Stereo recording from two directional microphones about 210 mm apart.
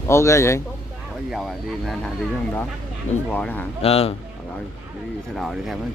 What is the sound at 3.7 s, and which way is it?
Speech, 30° left (ahead or behind).